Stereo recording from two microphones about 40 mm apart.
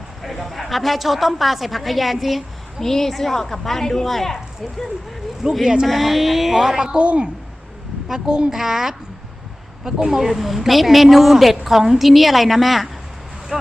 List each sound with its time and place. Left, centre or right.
0.2 s a woman's voice: centre
5.4 s a woman's voice: centre
5.8 s a woman's voice: centre
7.0 s a woman's voice: right
8.4 s a woman's voice: centre